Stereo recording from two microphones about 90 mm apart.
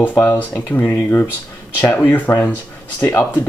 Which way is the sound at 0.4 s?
25° left (ahead or behind).